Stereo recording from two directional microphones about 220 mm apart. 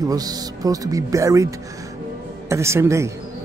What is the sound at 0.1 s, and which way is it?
A woman's voice, 15° right (ahead or behind).